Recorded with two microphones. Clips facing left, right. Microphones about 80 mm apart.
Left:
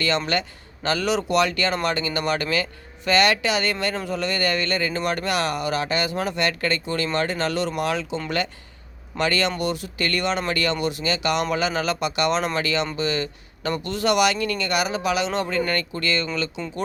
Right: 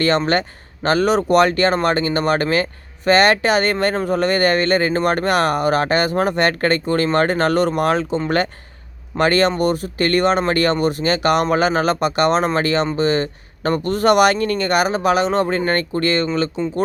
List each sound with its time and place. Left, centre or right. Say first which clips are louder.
0.3 s speech: right 6 dB; right